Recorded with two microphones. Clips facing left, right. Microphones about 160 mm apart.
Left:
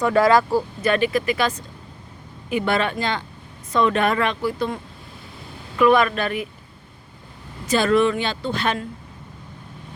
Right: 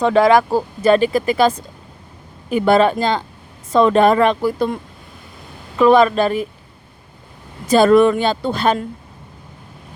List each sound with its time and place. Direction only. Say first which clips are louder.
0.0 s speech: right 4 dB; 20° right (ahead or behind); by 4.8 s 45° right (ahead or behind)
5.7 s speech: right 5 dB; 30° right (ahead or behind)
7.8 s speech: right 7 dB; 40° right (ahead or behind)